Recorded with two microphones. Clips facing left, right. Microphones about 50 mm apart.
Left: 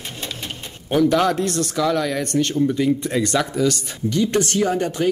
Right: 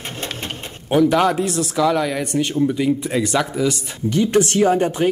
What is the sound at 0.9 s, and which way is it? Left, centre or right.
Speech, centre.